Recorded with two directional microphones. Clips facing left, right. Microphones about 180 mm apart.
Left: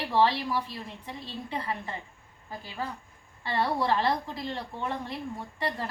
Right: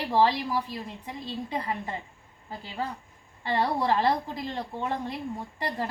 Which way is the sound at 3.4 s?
20° right (ahead or behind).